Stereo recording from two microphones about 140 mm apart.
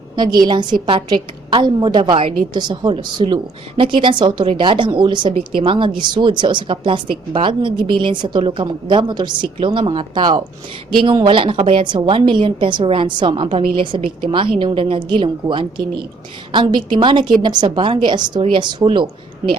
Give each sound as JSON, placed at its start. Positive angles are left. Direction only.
{"t": 0.2, "sound": "a woman's voice", "side_deg": -30}